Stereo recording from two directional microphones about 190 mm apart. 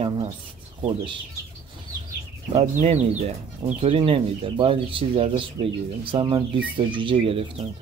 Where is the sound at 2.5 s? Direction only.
35° right (ahead or behind).